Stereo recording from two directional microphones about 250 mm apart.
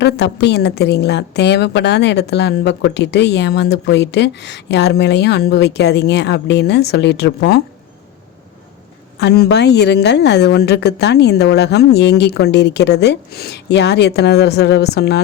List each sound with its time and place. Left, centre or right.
0.0 s a woman's voice: left
9.1 s speech: left